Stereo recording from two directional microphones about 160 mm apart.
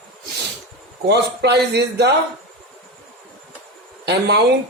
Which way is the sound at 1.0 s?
90° right.